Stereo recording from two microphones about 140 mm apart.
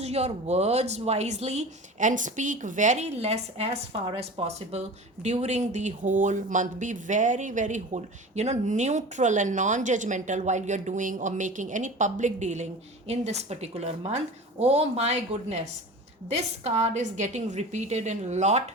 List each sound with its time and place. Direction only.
0.0 s a woman's voice: 50° right (ahead or behind)